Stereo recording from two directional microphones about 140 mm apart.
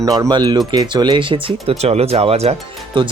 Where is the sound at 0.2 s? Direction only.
30° right (ahead or behind).